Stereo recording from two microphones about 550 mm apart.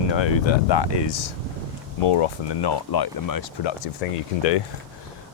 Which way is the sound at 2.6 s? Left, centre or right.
Left.